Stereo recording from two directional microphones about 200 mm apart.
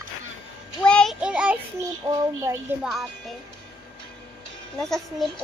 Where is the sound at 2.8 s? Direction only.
Centre (ahead or behind).